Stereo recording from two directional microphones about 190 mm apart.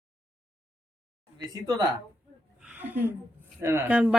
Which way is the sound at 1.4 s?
20° right (ahead or behind).